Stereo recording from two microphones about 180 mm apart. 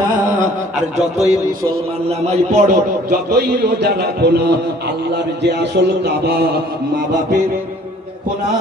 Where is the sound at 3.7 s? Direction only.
65° right (ahead or behind).